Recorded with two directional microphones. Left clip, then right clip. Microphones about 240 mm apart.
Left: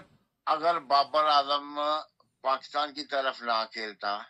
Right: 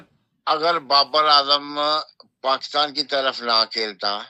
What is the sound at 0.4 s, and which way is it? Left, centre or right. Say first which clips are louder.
A man's voice: right 6 dB; right.